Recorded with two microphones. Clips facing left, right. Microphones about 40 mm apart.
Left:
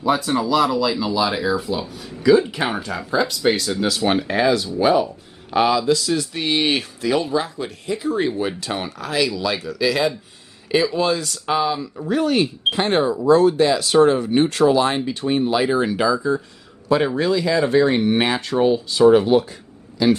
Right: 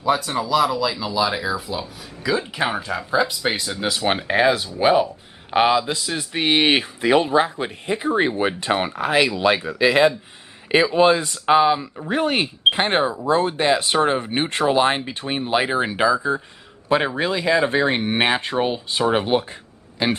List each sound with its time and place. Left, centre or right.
0.0 s speech: centre; by 20.1 s right